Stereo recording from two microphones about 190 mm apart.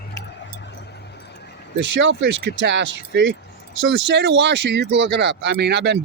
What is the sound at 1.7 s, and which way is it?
Speech, 75° right (ahead or behind).